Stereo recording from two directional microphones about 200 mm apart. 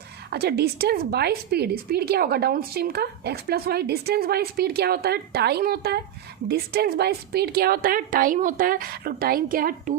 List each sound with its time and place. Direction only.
0.3 s a woman's voice: 55° right (ahead or behind)